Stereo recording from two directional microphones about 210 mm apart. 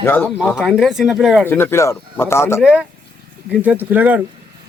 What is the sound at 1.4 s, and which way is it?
Speech, 10° left (ahead or behind).